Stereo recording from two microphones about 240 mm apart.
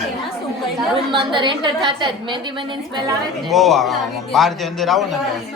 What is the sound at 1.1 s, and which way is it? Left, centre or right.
A woman's voice, centre.